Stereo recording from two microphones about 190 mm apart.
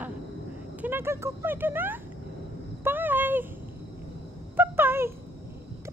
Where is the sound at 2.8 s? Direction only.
10° right (ahead or behind).